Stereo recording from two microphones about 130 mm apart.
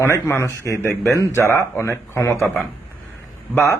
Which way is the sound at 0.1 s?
20° left (ahead or behind).